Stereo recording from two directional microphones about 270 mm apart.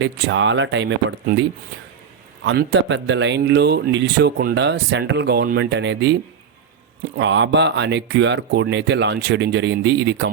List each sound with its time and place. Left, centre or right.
0.0 s speech: right
7.2 s speech: right